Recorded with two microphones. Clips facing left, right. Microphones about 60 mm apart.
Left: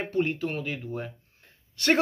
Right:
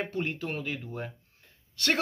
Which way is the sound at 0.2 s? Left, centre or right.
Centre.